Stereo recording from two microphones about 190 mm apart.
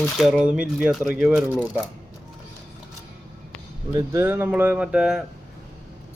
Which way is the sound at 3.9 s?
20° right (ahead or behind).